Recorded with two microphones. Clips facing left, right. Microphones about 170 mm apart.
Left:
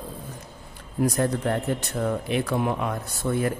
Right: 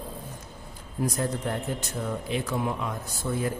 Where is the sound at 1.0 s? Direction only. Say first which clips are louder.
Left 5 dB; 65° left (ahead or behind).